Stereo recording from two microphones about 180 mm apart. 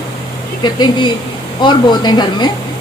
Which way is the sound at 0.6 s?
25° left (ahead or behind).